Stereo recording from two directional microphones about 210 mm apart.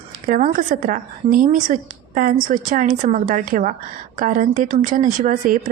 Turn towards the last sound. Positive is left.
turn(degrees=-40)  # may be behind; listen again after turning